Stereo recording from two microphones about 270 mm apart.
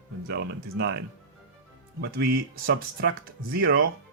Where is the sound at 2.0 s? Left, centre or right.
Right.